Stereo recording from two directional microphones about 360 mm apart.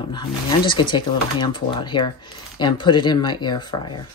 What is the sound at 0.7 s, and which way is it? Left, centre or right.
Speech, centre.